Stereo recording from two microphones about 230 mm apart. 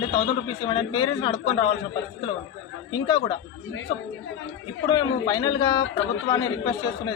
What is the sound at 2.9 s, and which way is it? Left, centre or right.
Speech, centre.